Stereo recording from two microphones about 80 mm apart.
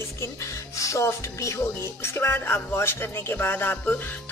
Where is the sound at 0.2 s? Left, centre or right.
Left.